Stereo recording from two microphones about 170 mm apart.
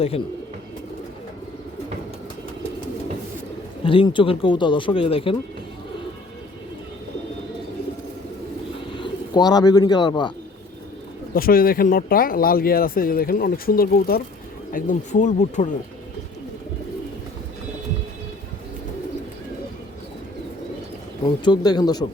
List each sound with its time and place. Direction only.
3.8 s speech: 30° left (ahead or behind)
9.0 s speech: 25° left (ahead or behind)
11.3 s speech: 60° left (ahead or behind)
21.2 s speech: 25° left (ahead or behind)